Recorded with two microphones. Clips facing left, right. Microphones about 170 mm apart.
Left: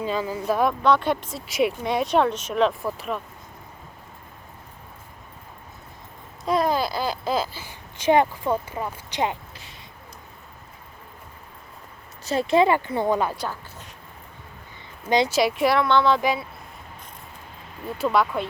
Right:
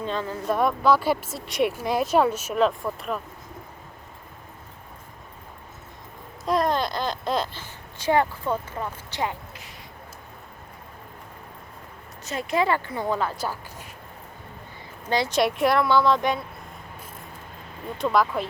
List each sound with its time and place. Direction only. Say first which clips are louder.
0.0 s speech: left 2 dB; 5° left (ahead or behind)
6.4 s a sound: left 1 dB; centre (ahead or behind)
7.9 s speech: left 3 dB; 20° left (ahead or behind)
12.2 s speech: left 5 dB; 30° left (ahead or behind); by 13.3 s 15° left (ahead or behind)
13.3 s a sound: right 1 dB; 5° right (ahead or behind)
15.3 s speech: left 1 dB; centre (ahead or behind)
17.9 s speech: even; 5° left (ahead or behind)